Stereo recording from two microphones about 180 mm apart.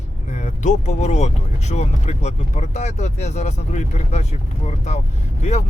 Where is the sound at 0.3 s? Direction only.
40° left (ahead or behind).